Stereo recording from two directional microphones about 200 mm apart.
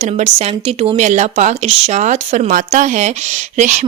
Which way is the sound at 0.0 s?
35° right (ahead or behind).